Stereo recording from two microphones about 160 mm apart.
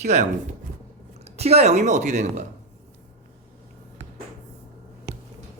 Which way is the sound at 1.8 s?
50° right (ahead or behind).